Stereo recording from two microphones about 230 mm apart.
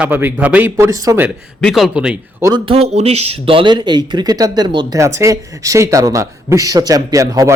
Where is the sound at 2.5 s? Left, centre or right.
Right.